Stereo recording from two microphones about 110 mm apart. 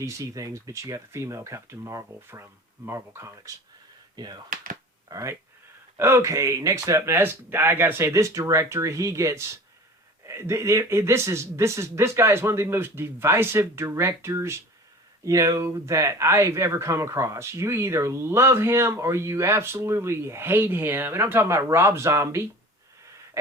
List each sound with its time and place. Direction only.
0.0 s speech: 30° right (ahead or behind)
4.1 s speech: 40° right (ahead or behind)
5.0 s speech: 30° right (ahead or behind)